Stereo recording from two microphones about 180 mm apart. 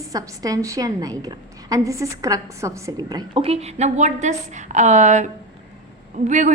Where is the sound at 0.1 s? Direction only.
20° right (ahead or behind).